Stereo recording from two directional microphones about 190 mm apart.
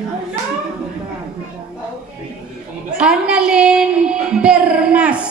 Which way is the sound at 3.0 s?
5° right (ahead or behind).